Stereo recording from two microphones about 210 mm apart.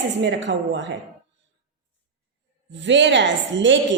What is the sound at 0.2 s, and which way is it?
Speech, 60° right (ahead or behind).